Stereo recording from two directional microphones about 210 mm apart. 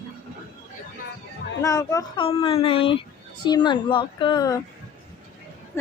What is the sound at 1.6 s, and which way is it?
Speech, 15° left (ahead or behind).